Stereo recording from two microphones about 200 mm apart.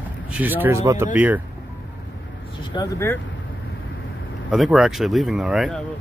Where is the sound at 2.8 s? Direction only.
15° left (ahead or behind).